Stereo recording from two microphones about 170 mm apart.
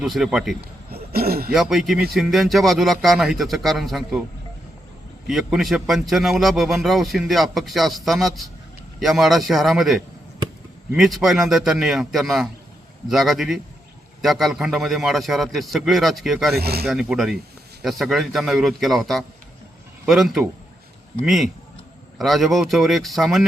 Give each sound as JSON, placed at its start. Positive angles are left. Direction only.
{"t": 0.0, "sound": "a man's voice", "side_deg": -5}
{"t": 0.6, "sound": "a sound", "side_deg": -65}
{"t": 1.5, "sound": "a man's voice", "side_deg": 0}
{"t": 5.3, "sound": "a man's voice", "side_deg": 0}
{"t": 16.6, "sound": "speech", "side_deg": -65}
{"t": 16.8, "sound": "a man's voice", "side_deg": 0}